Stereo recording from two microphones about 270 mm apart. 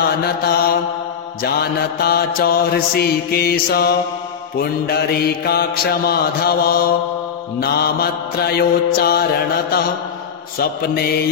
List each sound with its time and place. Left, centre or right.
0.2 s mantra: left